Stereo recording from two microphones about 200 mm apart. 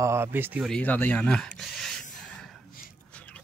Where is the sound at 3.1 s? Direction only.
5° left (ahead or behind).